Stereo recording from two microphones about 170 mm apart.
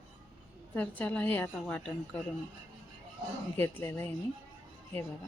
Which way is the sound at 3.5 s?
15° left (ahead or behind).